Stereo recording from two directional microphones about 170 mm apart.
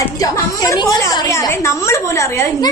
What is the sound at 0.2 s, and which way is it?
A woman's voice, 20° left (ahead or behind).